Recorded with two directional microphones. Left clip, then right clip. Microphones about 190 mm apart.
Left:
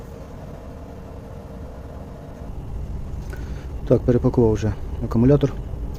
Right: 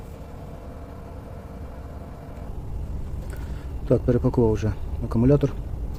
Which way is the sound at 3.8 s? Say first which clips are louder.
Left 3 dB; 10° left (ahead or behind).